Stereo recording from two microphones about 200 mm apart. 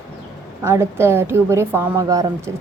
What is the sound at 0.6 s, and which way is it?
A woman's voice, 15° right (ahead or behind).